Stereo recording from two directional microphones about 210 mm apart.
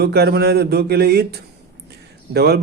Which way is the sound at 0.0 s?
50° right (ahead or behind).